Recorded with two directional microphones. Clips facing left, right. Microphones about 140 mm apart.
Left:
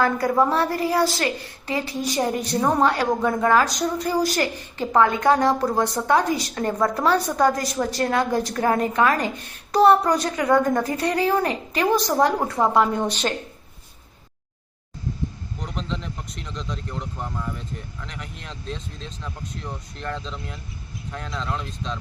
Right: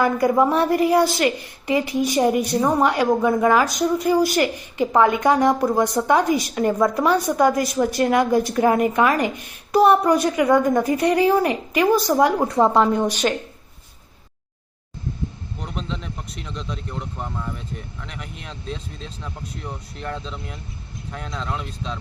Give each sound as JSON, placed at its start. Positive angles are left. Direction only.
{"t": 0.0, "sound": "speech", "side_deg": -15}
{"t": 15.6, "sound": "speech", "side_deg": 0}